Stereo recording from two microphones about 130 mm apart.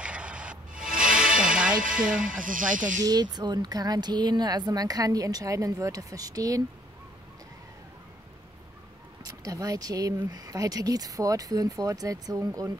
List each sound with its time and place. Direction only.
0.0 s music: 10° right (ahead or behind)
1.8 s speech: 90° right
3.0 s speech: 30° right (ahead or behind)
9.2 s speech: 25° right (ahead or behind)